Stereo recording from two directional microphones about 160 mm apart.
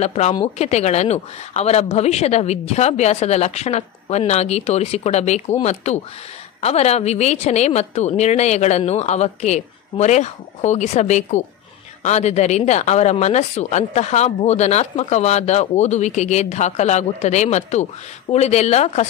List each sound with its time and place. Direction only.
0.0 s speech: 45° left (ahead or behind)